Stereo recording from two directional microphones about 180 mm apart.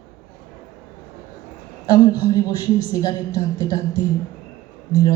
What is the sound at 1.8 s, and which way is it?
A woman's voice, 20° left (ahead or behind).